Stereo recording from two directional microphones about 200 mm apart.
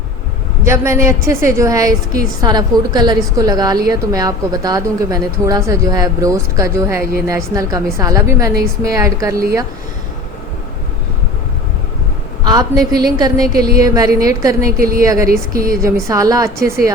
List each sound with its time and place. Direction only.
0.6 s a woman's voice: 15° right (ahead or behind)
12.5 s a woman's voice: 20° right (ahead or behind)
13.5 s a woman's voice: 50° right (ahead or behind)
13.7 s a woman's voice: 15° right (ahead or behind)
14.8 s a woman's voice: 45° right (ahead or behind)
15.0 s a woman's voice: 15° right (ahead or behind)
15.3 s a woman's voice: 45° right (ahead or behind)
15.8 s a woman's voice: 15° right (ahead or behind)